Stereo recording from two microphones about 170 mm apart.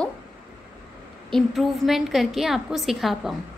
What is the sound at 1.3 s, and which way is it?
A woman's voice, centre (ahead or behind).